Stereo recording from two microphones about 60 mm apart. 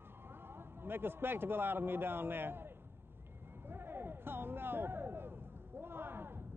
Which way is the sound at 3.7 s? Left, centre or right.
Right.